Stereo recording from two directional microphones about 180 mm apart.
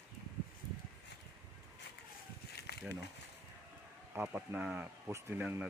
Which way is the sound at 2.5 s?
65° left (ahead or behind).